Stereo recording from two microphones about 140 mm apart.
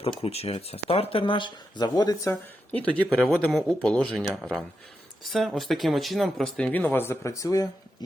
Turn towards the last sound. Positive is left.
turn(degrees=25)  # may be behind; listen again after turning